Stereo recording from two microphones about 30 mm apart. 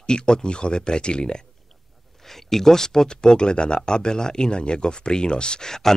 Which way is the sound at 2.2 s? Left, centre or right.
Centre.